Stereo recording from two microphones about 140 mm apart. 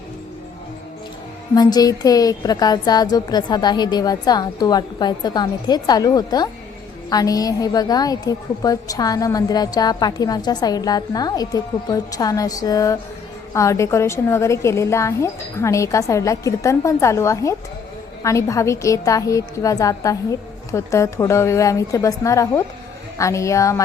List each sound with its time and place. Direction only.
1.5 s a woman's voice: 25° left (ahead or behind)